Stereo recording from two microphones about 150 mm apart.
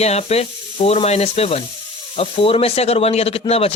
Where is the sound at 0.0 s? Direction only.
45° left (ahead or behind).